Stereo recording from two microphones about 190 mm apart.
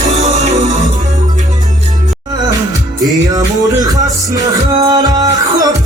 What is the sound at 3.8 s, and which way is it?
Music, 20° right (ahead or behind).